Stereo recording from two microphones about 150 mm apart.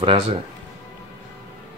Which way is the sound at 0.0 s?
35° right (ahead or behind).